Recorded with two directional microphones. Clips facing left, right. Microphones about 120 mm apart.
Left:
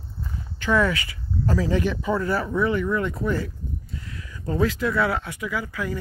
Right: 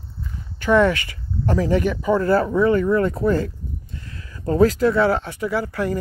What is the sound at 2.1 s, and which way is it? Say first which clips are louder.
Speech: right 6 dB; 30° right (ahead or behind).